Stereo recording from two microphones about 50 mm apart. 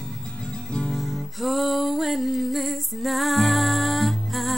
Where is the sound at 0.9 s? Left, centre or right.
Centre.